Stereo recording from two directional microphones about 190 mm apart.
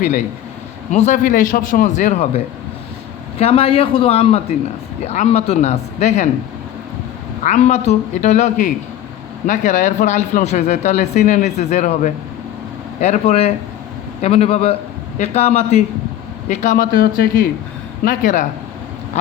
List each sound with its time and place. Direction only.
0.9 s speech: 40° left (ahead or behind)
7.4 s speech: 40° left (ahead or behind)